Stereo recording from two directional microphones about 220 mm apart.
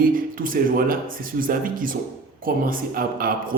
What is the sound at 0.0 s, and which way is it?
Speech, 40° right (ahead or behind).